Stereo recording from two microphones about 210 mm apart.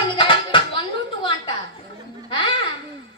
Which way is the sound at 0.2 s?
25° left (ahead or behind).